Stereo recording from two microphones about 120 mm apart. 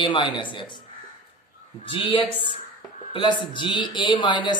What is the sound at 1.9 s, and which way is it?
A man's voice, 50° left (ahead or behind).